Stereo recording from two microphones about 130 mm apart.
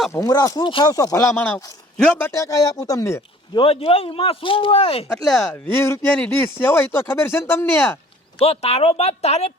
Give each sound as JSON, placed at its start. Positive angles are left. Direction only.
{"t": 0.1, "sound": "speech", "side_deg": 25}
{"t": 1.4, "sound": "speech", "side_deg": 15}
{"t": 3.5, "sound": "speech", "side_deg": 45}
{"t": 5.1, "sound": "speech", "side_deg": 0}
{"t": 5.5, "sound": "speech", "side_deg": 20}
{"t": 8.4, "sound": "speech", "side_deg": 50}